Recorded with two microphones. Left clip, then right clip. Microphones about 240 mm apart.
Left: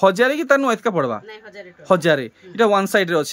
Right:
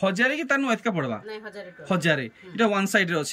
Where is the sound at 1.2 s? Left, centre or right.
Centre.